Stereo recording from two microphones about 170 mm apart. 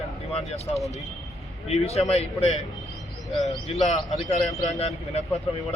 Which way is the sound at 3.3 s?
Centre (ahead or behind).